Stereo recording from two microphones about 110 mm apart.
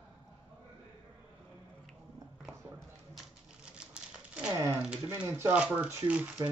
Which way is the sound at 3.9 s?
10° right (ahead or behind).